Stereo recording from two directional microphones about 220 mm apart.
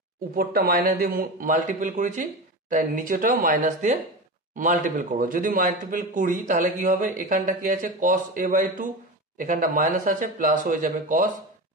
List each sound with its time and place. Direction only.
0.4 s a man's voice: 45° right (ahead or behind)